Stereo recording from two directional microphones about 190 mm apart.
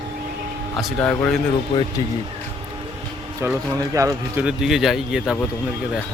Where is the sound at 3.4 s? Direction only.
10° right (ahead or behind).